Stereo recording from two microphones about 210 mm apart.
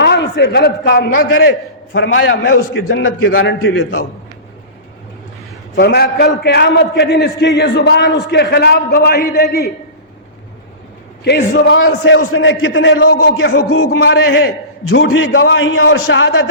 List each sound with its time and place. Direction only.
0.0 s a man's voice: 55° left (ahead or behind)
1.9 s a man's voice: 65° left (ahead or behind)
2.5 s a man's voice: 45° left (ahead or behind)
2.8 s a man's voice: 65° left (ahead or behind)
5.7 s a man's voice: 50° left (ahead or behind)
11.2 s a man's voice: 55° left (ahead or behind)